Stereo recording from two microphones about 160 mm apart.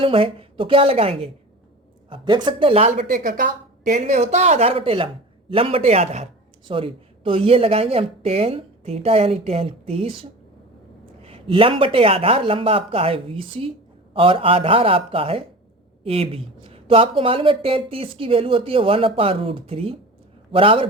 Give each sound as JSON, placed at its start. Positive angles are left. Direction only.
{"t": 0.0, "sound": "speech", "side_deg": -35}
{"t": 3.1, "sound": "speech", "side_deg": -55}